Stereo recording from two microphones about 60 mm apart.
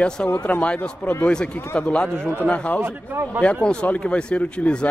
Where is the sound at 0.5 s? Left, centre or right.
Left.